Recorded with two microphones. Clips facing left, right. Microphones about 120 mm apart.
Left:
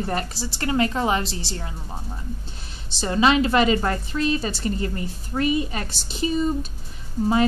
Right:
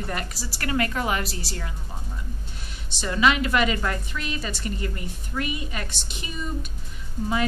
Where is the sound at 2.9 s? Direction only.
30° left (ahead or behind).